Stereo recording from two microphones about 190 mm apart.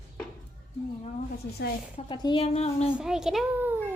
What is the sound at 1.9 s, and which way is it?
Speech, 25° left (ahead or behind).